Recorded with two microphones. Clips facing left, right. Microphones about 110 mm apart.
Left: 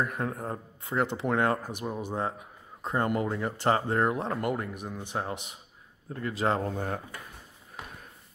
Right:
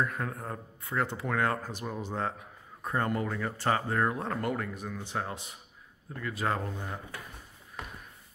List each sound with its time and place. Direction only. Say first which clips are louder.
0.0 s speech: left 2 dB; 25° left (ahead or behind)
6.1 s speech: left 4 dB; 30° left (ahead or behind)
6.7 s speech: left 6 dB; 55° left (ahead or behind)